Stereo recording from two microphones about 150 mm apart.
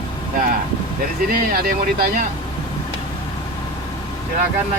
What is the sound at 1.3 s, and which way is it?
Speech, 75° right (ahead or behind).